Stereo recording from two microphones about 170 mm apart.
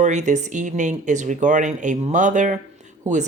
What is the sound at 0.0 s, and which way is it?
Speech, 45° right (ahead or behind).